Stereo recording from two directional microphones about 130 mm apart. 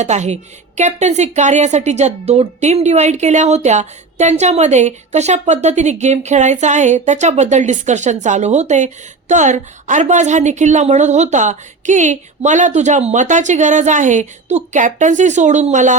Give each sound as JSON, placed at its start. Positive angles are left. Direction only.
{"t": 0.0, "sound": "a woman's voice", "side_deg": -60}